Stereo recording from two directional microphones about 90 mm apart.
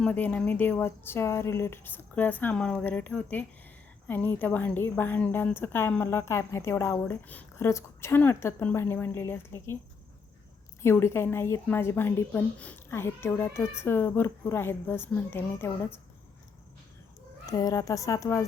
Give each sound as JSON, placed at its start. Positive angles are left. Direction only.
{"t": 0.1, "sound": "speech", "side_deg": 15}
{"t": 7.0, "sound": "speech", "side_deg": 15}
{"t": 7.5, "sound": "speech", "side_deg": 30}
{"t": 10.8, "sound": "speech", "side_deg": 30}
{"t": 12.9, "sound": "speech", "side_deg": 25}
{"t": 17.4, "sound": "speech", "side_deg": 40}